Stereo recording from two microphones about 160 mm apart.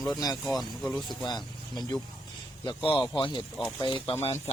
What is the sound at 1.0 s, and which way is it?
Speech, 25° left (ahead or behind).